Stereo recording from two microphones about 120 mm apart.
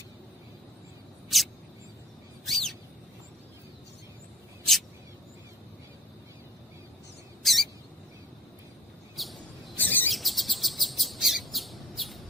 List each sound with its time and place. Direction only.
1.3 s a sound: centre (ahead or behind)
2.5 s bird: centre (ahead or behind)
7.4 s rodents: centre (ahead or behind)
9.1 s bird: centre (ahead or behind)
9.7 s bird: 15° left (ahead or behind)
10.1 s chirp: centre (ahead or behind)